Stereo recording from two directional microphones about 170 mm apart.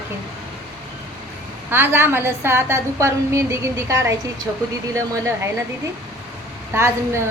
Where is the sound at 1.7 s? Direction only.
15° right (ahead or behind).